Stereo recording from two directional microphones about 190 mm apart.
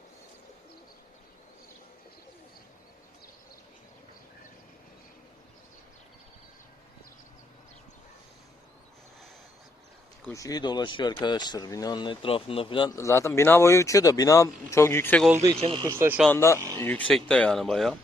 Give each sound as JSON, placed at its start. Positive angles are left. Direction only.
{"t": 10.2, "sound": "a man's voice", "side_deg": 15}
{"t": 15.4, "sound": "speech", "side_deg": -25}
{"t": 15.9, "sound": "speech", "side_deg": -10}
{"t": 16.2, "sound": "a man's voice", "side_deg": 10}